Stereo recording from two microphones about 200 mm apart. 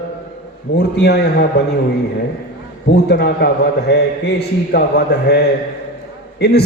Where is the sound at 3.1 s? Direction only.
55° left (ahead or behind).